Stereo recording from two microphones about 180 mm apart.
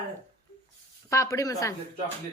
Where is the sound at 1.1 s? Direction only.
15° left (ahead or behind).